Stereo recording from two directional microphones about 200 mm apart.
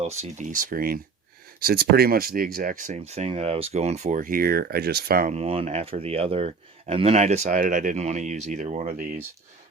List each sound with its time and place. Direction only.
0.0 s speech: 35° right (ahead or behind)
5.3 s speech: 30° right (ahead or behind)